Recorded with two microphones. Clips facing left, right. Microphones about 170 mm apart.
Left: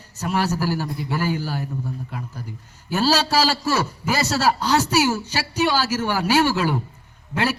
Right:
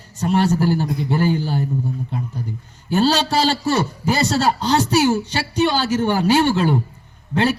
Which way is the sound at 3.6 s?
30° right (ahead or behind).